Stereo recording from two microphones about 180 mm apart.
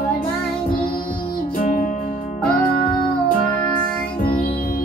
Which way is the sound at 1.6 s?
45° left (ahead or behind).